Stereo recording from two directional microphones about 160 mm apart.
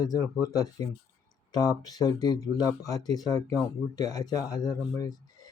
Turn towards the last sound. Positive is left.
turn(degrees=25)  # may be behind; listen again after turning